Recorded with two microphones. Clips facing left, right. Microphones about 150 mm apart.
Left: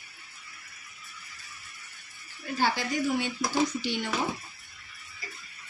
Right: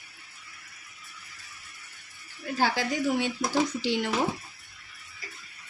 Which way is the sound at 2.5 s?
90° right.